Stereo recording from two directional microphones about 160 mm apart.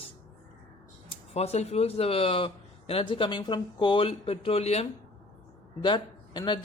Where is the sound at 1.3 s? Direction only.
40° left (ahead or behind).